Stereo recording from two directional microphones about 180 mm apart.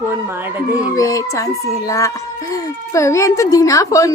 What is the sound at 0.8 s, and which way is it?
Speech, 20° left (ahead or behind).